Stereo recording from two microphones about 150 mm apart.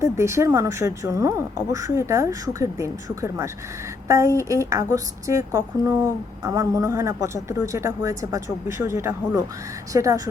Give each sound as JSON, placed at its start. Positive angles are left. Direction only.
{"t": 0.0, "sound": "speech", "side_deg": -20}